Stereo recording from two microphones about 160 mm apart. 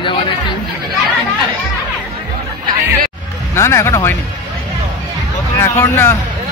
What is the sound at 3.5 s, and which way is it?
Speech, 15° left (ahead or behind).